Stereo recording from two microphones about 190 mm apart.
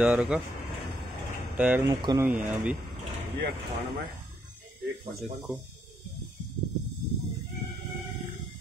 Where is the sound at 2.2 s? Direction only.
10° right (ahead or behind).